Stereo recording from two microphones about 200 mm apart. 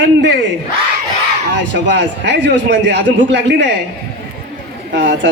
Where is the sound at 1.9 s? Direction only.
60° right (ahead or behind).